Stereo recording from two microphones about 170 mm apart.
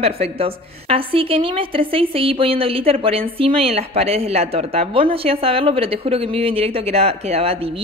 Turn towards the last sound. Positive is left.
turn(degrees=-35)  # may be behind; listen again after turning